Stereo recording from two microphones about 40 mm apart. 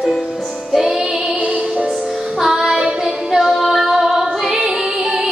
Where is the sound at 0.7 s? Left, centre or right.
Centre.